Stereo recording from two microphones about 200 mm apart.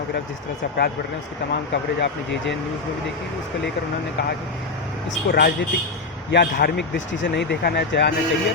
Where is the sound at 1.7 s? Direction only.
65° left (ahead or behind).